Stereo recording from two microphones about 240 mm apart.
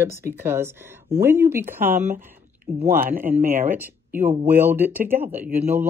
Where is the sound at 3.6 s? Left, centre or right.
Centre.